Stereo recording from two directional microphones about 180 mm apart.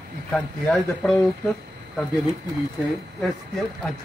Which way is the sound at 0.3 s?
5° left (ahead or behind).